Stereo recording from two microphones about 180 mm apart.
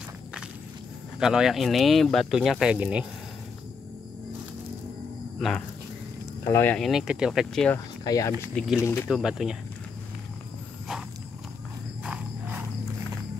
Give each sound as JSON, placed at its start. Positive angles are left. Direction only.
{"t": 1.2, "sound": "speech", "side_deg": -5}
{"t": 6.4, "sound": "speech", "side_deg": 10}
{"t": 6.9, "sound": "speech", "side_deg": -5}
{"t": 8.0, "sound": "speech", "side_deg": 20}
{"t": 9.1, "sound": "speech", "side_deg": 0}
{"t": 12.0, "sound": "cricket", "side_deg": -5}